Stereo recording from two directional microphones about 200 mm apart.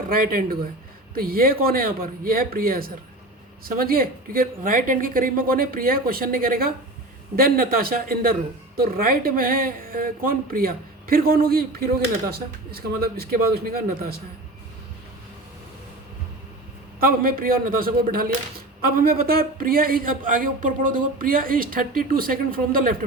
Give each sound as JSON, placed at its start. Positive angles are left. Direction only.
{"t": 0.1, "sound": "a woman's voice", "side_deg": -45}
{"t": 17.0, "sound": "a woman's voice", "side_deg": -45}